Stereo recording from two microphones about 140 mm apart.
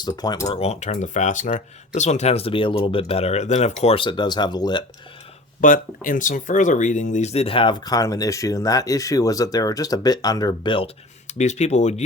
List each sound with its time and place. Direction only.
0.0 s speech: 30° left (ahead or behind)
0.5 s speech: 50° left (ahead or behind)
3.9 s speech: 35° left (ahead or behind)
5.5 s speech: 75° left (ahead or behind); by 10.8 s 35° left (ahead or behind)
11.3 s speech: 55° left (ahead or behind)